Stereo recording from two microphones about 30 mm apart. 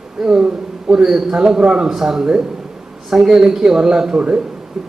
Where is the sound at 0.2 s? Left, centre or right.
Centre.